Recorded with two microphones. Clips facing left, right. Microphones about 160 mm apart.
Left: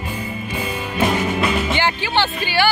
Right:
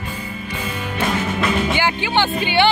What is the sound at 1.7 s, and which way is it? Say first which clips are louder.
Speech: even; 15° right (ahead or behind).